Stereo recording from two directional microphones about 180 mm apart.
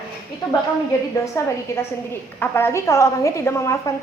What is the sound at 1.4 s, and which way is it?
A woman's voice, 15° left (ahead or behind).